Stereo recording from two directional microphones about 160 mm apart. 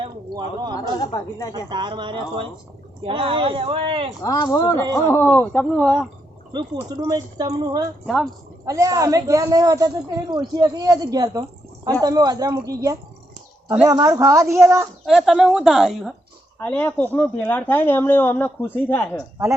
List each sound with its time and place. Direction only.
0.0 s a sound: 30° right (ahead or behind)
0.9 s speech: 25° left (ahead or behind)
1.7 s speech: 30° right (ahead or behind)
4.2 s speech: 25° left (ahead or behind); by 6.1 s 5° left (ahead or behind)
6.5 s a man's voice: 30° right (ahead or behind)
8.0 s speech: centre (ahead or behind)
8.6 s a man's voice: 20° right (ahead or behind)
15.0 s speech: centre (ahead or behind)
16.6 s speech: 10° left (ahead or behind)